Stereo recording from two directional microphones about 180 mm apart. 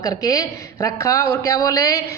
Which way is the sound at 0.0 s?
20° left (ahead or behind).